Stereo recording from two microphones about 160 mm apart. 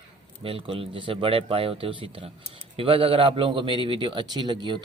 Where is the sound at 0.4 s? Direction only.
35° right (ahead or behind).